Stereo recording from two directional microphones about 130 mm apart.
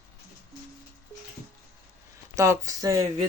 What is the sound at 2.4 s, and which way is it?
Speech, 25° right (ahead or behind).